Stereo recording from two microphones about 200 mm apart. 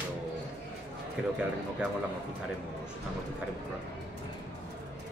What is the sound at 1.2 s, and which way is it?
Speech, 5° right (ahead or behind).